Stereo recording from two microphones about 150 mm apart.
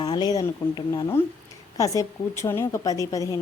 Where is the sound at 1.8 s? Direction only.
20° left (ahead or behind).